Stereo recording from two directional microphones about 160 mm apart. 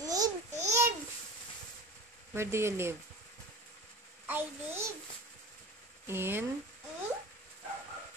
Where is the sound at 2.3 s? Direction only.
15° right (ahead or behind).